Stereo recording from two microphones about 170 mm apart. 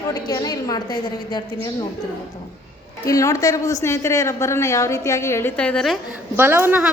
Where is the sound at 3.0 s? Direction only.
20° left (ahead or behind).